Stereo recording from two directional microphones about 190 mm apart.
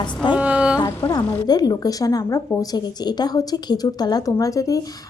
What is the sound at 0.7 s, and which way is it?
A woman's voice, 20° left (ahead or behind).